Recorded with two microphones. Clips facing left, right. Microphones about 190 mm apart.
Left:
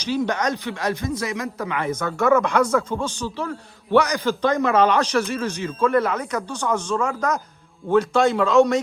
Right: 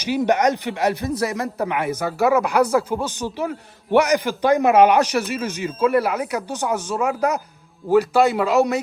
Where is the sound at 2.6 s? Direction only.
35° right (ahead or behind).